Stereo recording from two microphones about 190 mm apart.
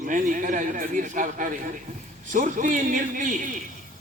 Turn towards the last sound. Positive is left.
turn(degrees=-45)  # may be behind; listen again after turning